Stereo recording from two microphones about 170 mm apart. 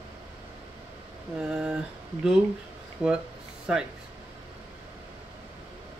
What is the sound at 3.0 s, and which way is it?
Speech, 5° right (ahead or behind).